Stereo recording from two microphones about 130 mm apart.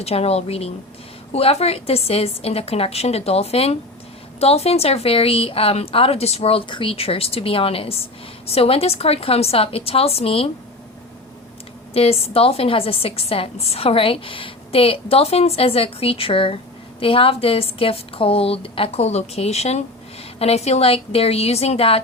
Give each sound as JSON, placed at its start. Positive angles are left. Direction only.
{"t": 0.0, "sound": "a woman's voice", "side_deg": 50}
{"t": 11.9, "sound": "a woman's voice", "side_deg": 50}